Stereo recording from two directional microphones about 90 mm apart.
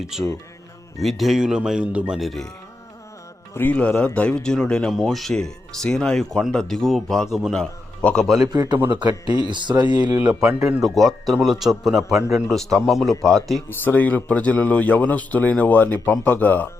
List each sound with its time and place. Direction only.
0.1 s a man's voice: 5° right (ahead or behind)
2.1 s a man's voice: centre (ahead or behind)
3.5 s a man's voice: 20° left (ahead or behind); by 8.4 s centre (ahead or behind)
8.4 s speech: 50° right (ahead or behind)
10.2 s a man's voice: 15° right (ahead or behind); by 13.6 s centre (ahead or behind)
13.7 s speech: 20° left (ahead or behind)